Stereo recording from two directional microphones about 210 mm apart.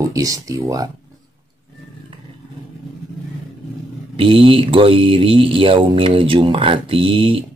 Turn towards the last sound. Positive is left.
turn(degrees=-25)  # may be behind; listen again after turning